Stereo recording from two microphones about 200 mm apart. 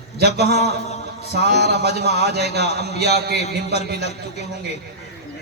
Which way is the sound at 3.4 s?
35° left (ahead or behind).